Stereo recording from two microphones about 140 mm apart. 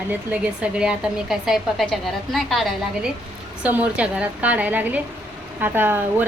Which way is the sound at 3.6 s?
10° right (ahead or behind).